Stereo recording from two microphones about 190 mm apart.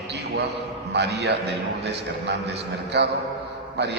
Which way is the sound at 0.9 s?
60° right (ahead or behind).